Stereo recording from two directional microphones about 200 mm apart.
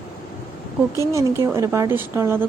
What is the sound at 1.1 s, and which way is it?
A woman's voice, 15° right (ahead or behind).